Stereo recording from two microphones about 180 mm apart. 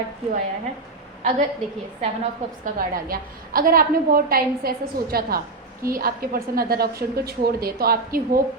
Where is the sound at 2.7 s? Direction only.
55° right (ahead or behind).